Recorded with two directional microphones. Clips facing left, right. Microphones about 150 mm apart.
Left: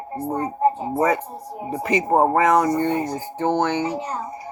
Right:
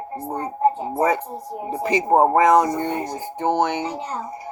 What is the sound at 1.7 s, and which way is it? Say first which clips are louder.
A child's voice: right 1 dB; 30° right (ahead or behind).